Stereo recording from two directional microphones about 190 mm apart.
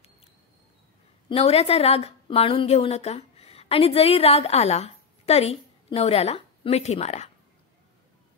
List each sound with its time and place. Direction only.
1.3 s a woman's voice: 30° left (ahead or behind)